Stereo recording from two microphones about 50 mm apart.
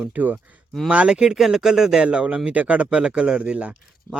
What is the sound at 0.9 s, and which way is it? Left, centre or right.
Speech, right.